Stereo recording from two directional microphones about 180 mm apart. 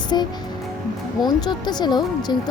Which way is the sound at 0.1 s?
25° left (ahead or behind).